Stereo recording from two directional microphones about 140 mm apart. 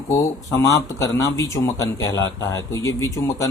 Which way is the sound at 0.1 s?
20° left (ahead or behind).